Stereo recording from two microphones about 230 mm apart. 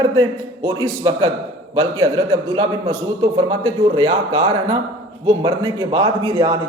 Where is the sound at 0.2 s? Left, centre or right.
Centre.